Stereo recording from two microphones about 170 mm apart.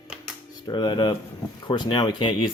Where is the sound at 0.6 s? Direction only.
25° left (ahead or behind).